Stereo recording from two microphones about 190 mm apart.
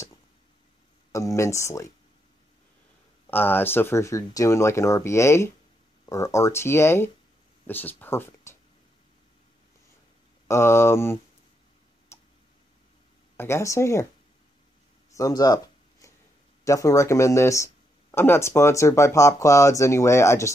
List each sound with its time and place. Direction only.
1.1 s speech: 15° left (ahead or behind)
3.3 s speech: 10° left (ahead or behind)
10.5 s speech: 15° left (ahead or behind)
12.1 s tick: 15° left (ahead or behind)
13.4 s speech: 15° left (ahead or behind)
15.1 s a sound: 20° left (ahead or behind)
16.6 s speech: 15° left (ahead or behind)